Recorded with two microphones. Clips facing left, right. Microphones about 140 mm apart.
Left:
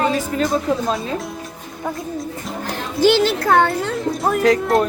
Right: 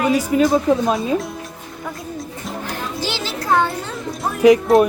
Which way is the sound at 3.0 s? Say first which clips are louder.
Left 15 dB; 55° left (ahead or behind).